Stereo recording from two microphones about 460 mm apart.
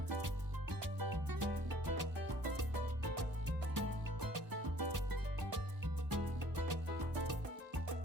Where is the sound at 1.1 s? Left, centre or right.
Right.